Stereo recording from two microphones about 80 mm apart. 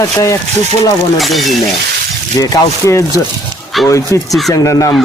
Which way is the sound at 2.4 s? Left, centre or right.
Left.